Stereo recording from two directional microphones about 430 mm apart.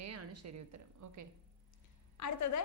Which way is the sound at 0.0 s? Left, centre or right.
Right.